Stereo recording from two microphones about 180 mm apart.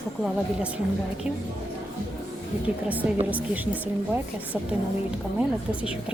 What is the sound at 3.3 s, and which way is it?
Speech, 10° right (ahead or behind).